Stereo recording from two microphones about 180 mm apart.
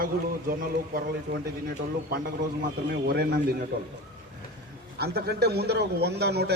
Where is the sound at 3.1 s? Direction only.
60° right (ahead or behind).